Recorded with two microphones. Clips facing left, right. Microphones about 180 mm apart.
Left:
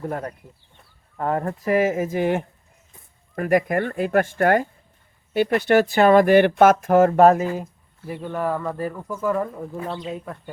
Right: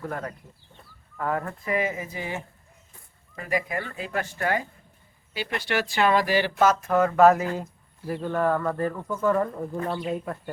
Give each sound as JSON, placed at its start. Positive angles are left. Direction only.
{"t": 1.1, "sound": "speech", "side_deg": 35}
{"t": 7.4, "sound": "speech", "side_deg": 10}